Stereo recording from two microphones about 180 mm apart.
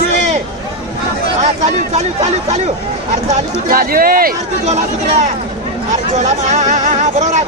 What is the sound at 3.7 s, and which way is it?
Speech, 55° right (ahead or behind).